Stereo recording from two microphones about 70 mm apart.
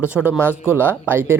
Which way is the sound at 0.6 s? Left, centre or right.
Left.